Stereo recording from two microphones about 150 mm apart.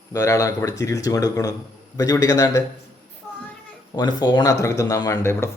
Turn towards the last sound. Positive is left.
turn(degrees=20)  # may be behind; listen again after turning